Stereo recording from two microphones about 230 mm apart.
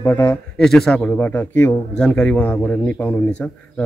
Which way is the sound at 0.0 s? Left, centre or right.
Centre.